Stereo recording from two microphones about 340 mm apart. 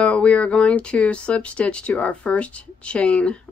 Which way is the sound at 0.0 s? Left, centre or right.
Centre.